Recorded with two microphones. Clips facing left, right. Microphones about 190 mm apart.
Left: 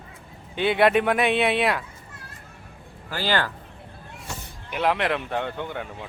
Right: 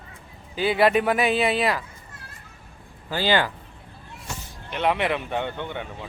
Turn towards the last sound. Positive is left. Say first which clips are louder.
# even
turn(degrees=0)  # may be behind; listen again after turning